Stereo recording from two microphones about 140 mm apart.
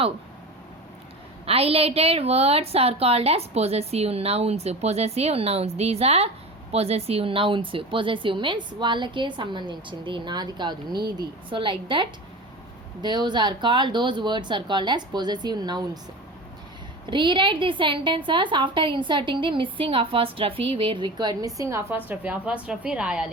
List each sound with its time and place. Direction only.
1.5 s a woman's voice: 45° right (ahead or behind)
17.1 s a woman's voice: 35° right (ahead or behind); by 23.3 s 5° right (ahead or behind)